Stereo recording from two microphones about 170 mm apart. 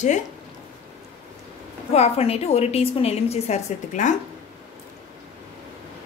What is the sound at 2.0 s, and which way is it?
A woman's voice, 40° left (ahead or behind).